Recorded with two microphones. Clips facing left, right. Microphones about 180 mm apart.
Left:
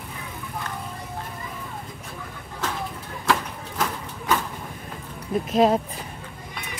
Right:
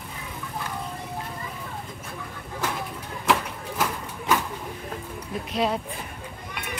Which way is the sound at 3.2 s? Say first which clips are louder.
Even; 15° right (ahead or behind).